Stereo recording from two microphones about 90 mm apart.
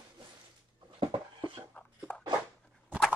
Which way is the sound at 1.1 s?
65° right (ahead or behind).